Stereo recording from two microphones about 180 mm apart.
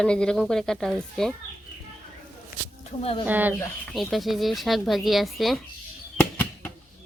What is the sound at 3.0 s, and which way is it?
Speech, 35° left (ahead or behind).